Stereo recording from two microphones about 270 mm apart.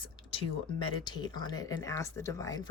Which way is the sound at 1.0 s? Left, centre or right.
Centre.